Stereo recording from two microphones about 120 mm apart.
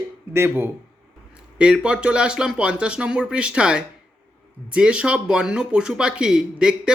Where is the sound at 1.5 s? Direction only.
5° right (ahead or behind).